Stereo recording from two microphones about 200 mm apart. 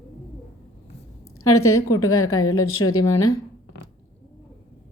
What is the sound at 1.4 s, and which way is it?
A woman's voice, 90° left.